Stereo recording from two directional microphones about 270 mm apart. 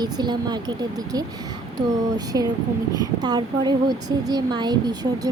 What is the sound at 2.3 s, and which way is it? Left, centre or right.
Speech, centre.